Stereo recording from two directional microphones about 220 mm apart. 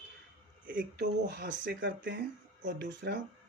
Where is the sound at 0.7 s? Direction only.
45° right (ahead or behind).